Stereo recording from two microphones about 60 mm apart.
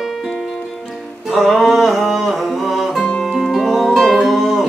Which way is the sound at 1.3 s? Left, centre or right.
Centre.